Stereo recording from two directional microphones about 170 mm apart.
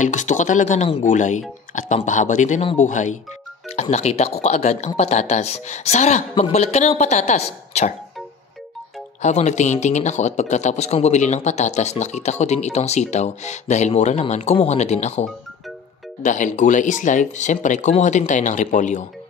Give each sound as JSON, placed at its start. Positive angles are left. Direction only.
{"t": 0.0, "sound": "speech", "side_deg": 45}
{"t": 9.2, "sound": "speech", "side_deg": 40}